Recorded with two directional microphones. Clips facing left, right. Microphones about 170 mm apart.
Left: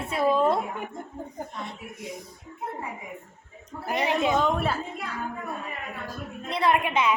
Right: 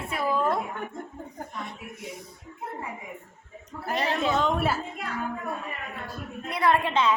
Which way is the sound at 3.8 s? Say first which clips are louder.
Left 2 dB; 15° left (ahead or behind).